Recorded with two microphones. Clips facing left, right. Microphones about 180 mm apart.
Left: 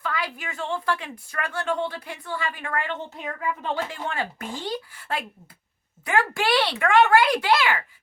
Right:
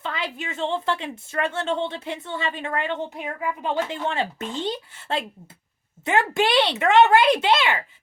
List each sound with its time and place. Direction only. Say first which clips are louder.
0.0 s a woman's voice: even; 25° right (ahead or behind)